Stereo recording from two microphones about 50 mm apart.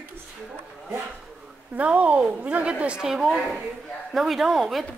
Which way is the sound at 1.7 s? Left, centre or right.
Right.